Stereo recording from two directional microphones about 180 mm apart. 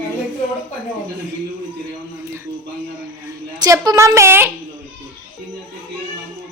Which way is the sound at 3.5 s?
20° right (ahead or behind).